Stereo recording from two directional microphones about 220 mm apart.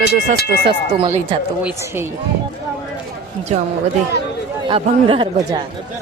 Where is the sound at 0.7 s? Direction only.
25° right (ahead or behind).